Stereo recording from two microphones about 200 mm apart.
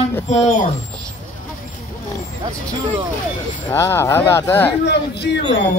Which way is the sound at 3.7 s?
15° left (ahead or behind).